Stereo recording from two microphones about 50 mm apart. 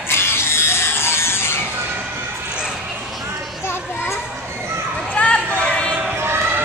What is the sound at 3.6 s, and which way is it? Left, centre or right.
Children playing, left.